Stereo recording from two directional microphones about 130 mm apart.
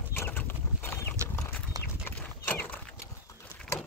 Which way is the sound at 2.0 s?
15° left (ahead or behind).